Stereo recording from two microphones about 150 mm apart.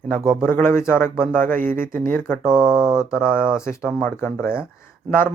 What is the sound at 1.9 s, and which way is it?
Speech, 65° right (ahead or behind).